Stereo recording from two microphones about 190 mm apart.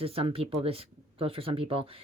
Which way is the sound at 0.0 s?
30° right (ahead or behind).